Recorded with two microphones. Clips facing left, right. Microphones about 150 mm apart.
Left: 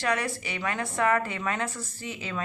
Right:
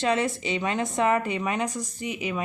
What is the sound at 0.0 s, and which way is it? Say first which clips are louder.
A woman's voice: right 4 dB; 20° right (ahead or behind).